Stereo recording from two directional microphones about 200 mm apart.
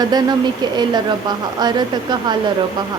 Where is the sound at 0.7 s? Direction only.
20° right (ahead or behind).